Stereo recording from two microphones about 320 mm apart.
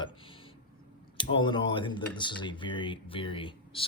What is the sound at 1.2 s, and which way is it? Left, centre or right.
Speech, centre.